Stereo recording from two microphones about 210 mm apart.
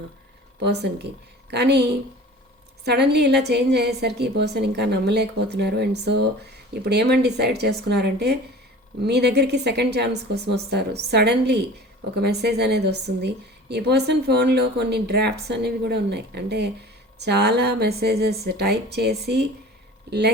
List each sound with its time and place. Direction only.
0.6 s a woman's voice: 55° right (ahead or behind)